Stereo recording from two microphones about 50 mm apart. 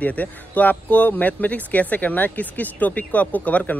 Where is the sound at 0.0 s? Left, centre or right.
Left.